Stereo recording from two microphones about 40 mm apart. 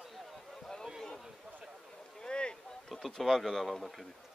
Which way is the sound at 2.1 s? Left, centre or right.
Left.